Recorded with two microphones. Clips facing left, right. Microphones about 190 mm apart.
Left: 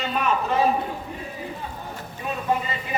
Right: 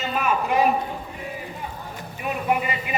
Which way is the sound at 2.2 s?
15° right (ahead or behind).